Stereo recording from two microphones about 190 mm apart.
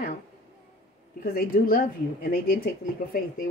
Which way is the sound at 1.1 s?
50° left (ahead or behind).